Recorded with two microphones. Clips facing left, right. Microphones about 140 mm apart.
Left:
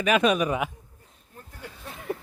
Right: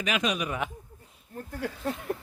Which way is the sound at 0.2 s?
50° left (ahead or behind).